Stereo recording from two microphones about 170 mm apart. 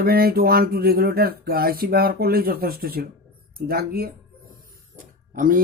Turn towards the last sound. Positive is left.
turn(degrees=-55)  # may be behind; listen again after turning